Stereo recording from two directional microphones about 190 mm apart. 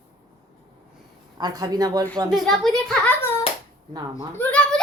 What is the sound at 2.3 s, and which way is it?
A woman's voice, centre (ahead or behind).